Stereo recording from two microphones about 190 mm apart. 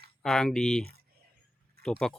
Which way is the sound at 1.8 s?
55° right (ahead or behind).